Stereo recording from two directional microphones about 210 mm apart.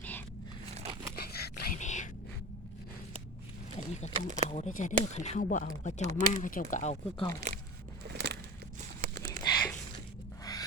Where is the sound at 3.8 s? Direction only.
35° left (ahead or behind).